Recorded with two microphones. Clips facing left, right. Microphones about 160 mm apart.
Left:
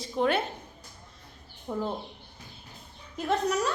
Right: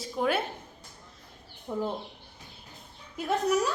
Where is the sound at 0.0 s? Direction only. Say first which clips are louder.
Left 2 dB; 5° right (ahead or behind).